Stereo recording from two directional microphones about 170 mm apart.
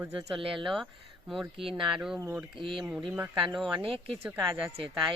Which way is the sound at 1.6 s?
30° right (ahead or behind).